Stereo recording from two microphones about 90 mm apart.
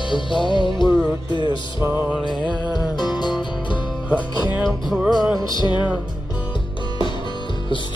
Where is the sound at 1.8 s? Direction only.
25° right (ahead or behind).